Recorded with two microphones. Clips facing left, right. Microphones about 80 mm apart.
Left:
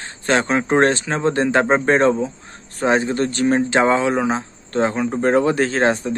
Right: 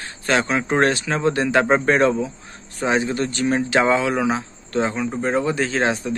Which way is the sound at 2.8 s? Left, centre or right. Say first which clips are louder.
Left 3 dB; left.